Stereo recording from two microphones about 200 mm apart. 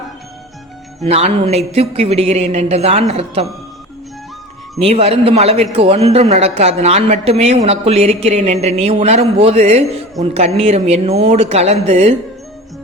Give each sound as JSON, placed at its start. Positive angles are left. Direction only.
{"t": 1.0, "sound": "speech", "side_deg": -30}
{"t": 4.8, "sound": "a man's voice", "side_deg": -30}